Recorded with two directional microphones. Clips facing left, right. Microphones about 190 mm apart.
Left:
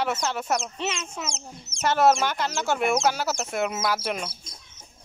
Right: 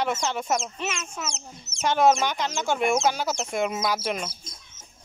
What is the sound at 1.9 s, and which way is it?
Speech, 5° left (ahead or behind).